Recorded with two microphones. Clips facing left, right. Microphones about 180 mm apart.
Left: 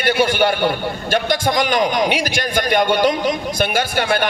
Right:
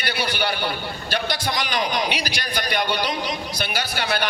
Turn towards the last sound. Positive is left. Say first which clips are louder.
# left 6 dB
turn(degrees=50)  # may be behind; listen again after turning